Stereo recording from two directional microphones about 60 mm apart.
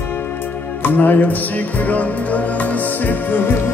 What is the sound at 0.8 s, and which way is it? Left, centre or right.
Speech, left.